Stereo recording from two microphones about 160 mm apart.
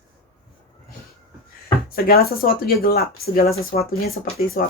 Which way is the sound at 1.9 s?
70° left (ahead or behind).